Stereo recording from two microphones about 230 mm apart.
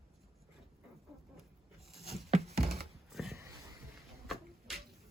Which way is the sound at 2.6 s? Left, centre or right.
Right.